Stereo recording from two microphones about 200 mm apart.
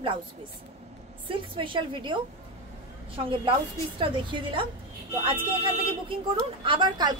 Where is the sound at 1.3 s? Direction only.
25° right (ahead or behind).